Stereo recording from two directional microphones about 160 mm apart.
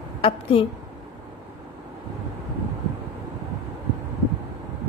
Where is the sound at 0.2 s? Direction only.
35° left (ahead or behind).